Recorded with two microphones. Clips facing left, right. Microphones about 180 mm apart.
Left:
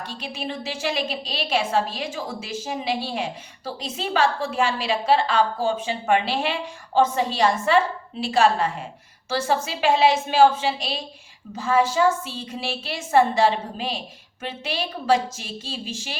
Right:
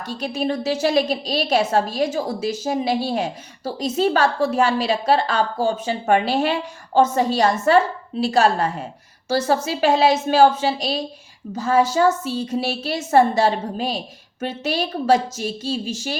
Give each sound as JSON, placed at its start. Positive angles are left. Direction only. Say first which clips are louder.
{"t": 0.0, "sound": "a woman's voice", "louder": "right 8 dB", "side_deg": -45}